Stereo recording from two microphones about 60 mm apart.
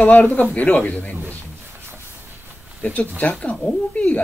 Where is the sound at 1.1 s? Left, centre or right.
Right.